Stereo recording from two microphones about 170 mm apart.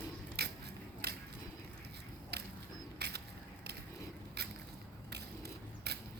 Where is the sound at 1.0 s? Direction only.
70° right (ahead or behind).